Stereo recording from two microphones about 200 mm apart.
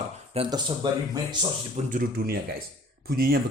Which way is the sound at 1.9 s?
45° right (ahead or behind).